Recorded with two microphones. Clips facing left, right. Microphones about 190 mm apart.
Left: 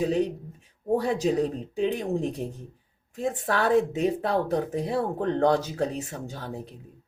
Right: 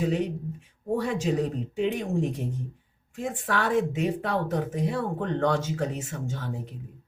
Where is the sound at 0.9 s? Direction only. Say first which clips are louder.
Left 2 dB; 35° left (ahead or behind).